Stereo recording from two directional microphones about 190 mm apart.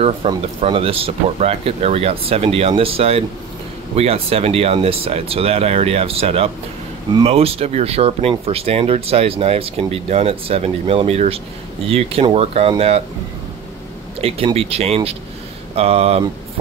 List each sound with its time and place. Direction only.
0.3 s speech: 30° right (ahead or behind)
14.2 s speech: 30° right (ahead or behind)